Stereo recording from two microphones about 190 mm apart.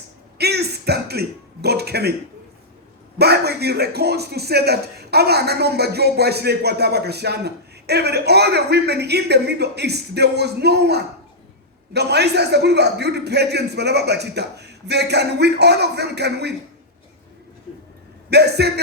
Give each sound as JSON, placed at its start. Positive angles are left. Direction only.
{"t": 0.3, "sound": "a man's voice", "side_deg": -60}
{"t": 3.2, "sound": "speech", "side_deg": -60}
{"t": 18.3, "sound": "speech", "side_deg": -60}